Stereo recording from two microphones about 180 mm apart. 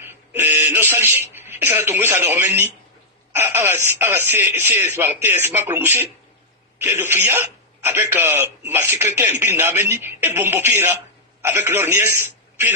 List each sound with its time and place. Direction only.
0.7 s a sound: 10° right (ahead or behind)
1.3 s speech: 10° right (ahead or behind)
6.8 s a man's voice: 10° right (ahead or behind)